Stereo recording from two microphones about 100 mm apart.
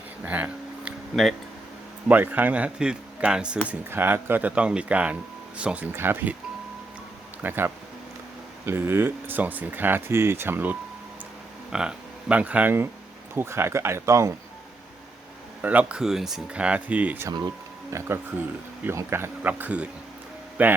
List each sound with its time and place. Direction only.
0.2 s a sound: 15° right (ahead or behind)
1.1 s speech: centre (ahead or behind)
2.0 s speech: 15° right (ahead or behind)
3.7 s speech: 20° right (ahead or behind)
7.4 s speech: 20° right (ahead or behind)
11.7 s speech: 10° right (ahead or behind); by 14.3 s 30° right (ahead or behind)
15.6 s speech: 15° right (ahead or behind)
17.9 s speech: 25° right (ahead or behind)